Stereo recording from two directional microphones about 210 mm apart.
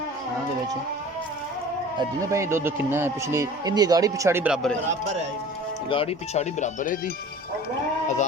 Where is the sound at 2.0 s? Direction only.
15° right (ahead or behind); by 4.8 s centre (ahead or behind).